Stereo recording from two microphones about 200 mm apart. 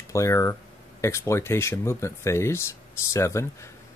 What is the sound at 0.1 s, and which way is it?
Speech, 15° left (ahead or behind).